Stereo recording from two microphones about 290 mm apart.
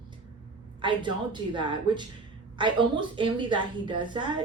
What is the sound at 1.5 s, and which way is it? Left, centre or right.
A woman's voice, centre.